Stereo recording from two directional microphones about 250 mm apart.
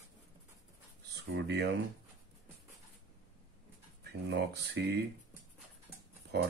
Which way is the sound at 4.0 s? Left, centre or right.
Right.